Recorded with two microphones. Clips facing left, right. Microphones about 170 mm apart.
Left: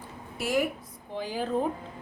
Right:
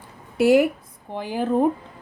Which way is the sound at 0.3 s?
70° right (ahead or behind).